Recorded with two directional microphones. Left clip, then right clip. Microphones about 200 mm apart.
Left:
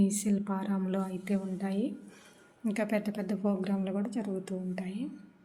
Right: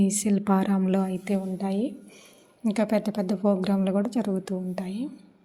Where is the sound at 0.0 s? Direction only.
25° right (ahead or behind).